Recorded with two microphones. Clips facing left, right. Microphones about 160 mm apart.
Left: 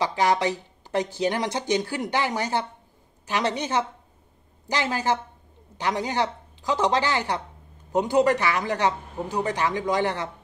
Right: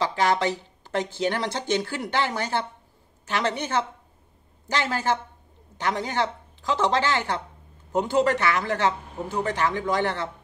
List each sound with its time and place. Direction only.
0.0 s speech: 15° left (ahead or behind)